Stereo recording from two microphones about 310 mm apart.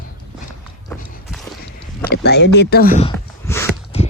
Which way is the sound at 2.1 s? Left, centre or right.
Left.